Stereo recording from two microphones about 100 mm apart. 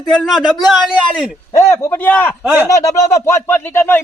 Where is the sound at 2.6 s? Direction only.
35° left (ahead or behind).